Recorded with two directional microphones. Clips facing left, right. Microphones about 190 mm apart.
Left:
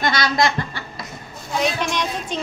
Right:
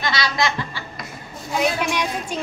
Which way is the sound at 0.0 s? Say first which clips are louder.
Left 3 dB; 50° left (ahead or behind).